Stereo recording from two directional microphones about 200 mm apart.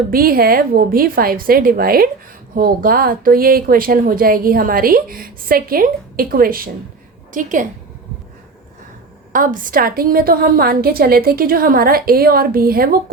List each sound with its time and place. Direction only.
0.1 s a woman's voice: 45° right (ahead or behind)
9.3 s speech: 45° right (ahead or behind)